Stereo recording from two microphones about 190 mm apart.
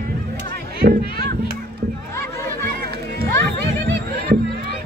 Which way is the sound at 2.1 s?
15° left (ahead or behind).